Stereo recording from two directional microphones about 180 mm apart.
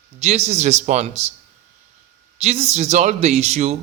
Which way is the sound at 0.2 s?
40° right (ahead or behind).